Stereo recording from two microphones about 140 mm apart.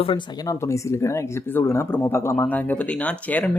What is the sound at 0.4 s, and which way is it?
Speech, 20° left (ahead or behind).